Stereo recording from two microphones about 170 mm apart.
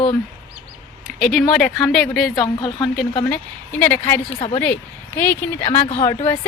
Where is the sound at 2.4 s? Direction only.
25° left (ahead or behind).